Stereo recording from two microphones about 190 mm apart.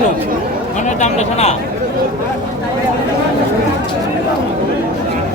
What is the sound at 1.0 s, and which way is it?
Speech, 35° left (ahead or behind).